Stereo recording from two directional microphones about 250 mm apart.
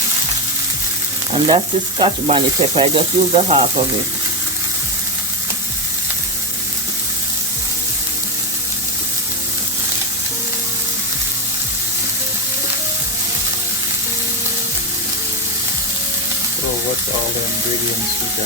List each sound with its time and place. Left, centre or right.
1.3 s frying: right